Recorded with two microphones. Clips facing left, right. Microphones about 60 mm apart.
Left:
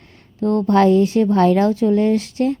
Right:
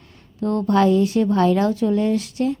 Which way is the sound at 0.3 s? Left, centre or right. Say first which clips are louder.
Left 3 dB; left.